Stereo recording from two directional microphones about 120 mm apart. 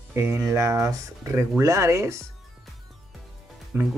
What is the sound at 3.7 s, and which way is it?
Speech, 15° right (ahead or behind).